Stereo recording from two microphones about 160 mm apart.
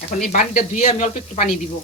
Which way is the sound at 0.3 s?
50° left (ahead or behind).